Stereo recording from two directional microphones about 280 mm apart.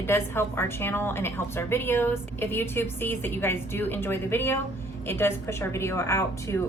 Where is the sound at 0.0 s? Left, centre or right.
Centre.